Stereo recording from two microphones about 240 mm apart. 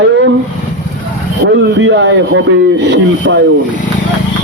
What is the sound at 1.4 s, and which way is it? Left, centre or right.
Speech, right.